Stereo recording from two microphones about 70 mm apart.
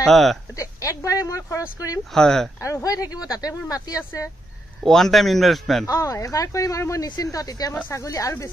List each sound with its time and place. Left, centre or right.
0.1 s a man's voice: centre
0.6 s a sound: left
2.1 s speech: centre
2.6 s speech: left
4.8 s a man's voice: centre
5.9 s speech: left
7.9 s speech: left